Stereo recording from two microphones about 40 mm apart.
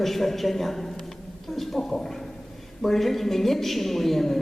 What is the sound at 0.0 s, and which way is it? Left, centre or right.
A woman's voice, centre.